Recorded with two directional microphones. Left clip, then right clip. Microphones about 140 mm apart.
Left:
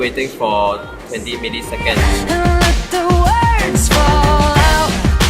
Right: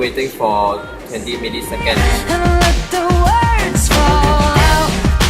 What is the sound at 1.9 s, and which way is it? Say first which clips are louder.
Music: even; centre (ahead or behind).